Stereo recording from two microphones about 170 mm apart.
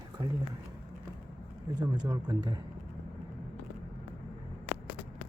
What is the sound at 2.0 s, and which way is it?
Speech, 25° right (ahead or behind).